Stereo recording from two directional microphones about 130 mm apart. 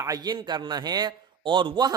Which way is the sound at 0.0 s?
30° right (ahead or behind).